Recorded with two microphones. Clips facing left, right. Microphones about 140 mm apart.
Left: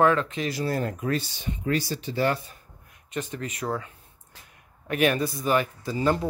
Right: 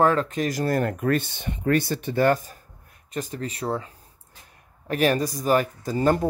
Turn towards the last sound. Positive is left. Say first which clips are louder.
# right 3 dB
turn(degrees=-45)  # may be behind; listen again after turning